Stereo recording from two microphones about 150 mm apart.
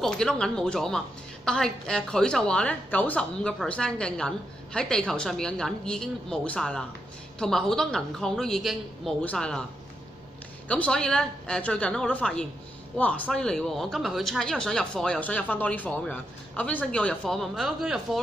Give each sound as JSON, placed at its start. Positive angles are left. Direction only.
{"t": 0.0, "sound": "speech", "side_deg": 5}
{"t": 10.7, "sound": "a woman's voice", "side_deg": 5}